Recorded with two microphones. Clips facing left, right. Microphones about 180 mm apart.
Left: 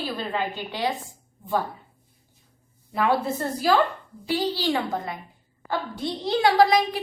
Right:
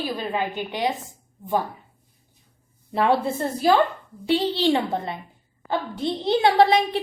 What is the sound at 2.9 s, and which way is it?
A woman's voice, 25° right (ahead or behind).